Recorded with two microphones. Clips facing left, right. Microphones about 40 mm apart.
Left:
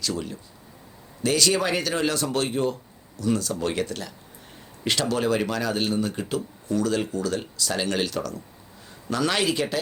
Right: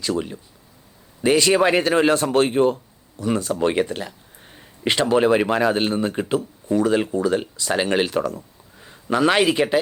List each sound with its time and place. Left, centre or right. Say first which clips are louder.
1.2 s speech: right 6 dB; right